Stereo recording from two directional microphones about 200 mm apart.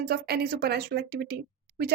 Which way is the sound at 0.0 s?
50° right (ahead or behind).